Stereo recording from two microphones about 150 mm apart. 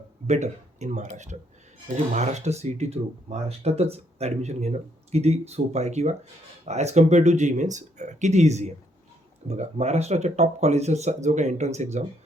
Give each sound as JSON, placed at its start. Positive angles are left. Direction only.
{"t": 0.3, "sound": "speech", "side_deg": -50}